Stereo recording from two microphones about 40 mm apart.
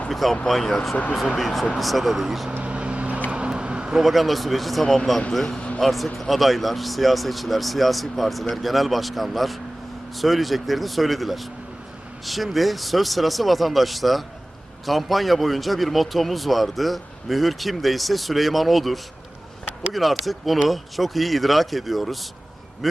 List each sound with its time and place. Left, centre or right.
0.1 s speech: centre
2.6 s vehicle: right
3.2 s a sound: right
4.0 s speech: centre
5.5 s a sound: left
5.8 s speech: centre